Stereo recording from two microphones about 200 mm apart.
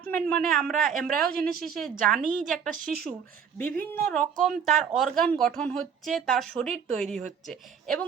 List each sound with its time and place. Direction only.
0.0 s a woman's voice: 5° left (ahead or behind)